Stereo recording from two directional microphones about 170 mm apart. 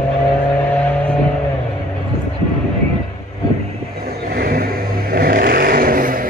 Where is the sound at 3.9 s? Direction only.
60° right (ahead or behind).